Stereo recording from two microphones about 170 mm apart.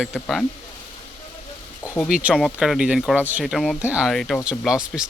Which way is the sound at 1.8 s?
15° left (ahead or behind).